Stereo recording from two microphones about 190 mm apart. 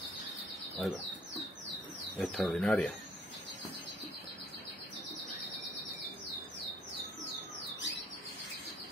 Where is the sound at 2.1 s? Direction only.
Centre (ahead or behind).